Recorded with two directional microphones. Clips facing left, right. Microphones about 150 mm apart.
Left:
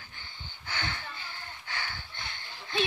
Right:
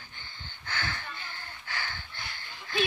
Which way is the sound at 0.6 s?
20° left (ahead or behind).